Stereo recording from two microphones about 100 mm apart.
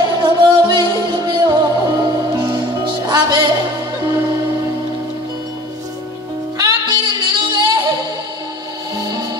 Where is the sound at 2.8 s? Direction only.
45° right (ahead or behind).